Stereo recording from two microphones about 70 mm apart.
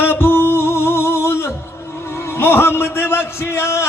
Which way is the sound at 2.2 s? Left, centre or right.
Left.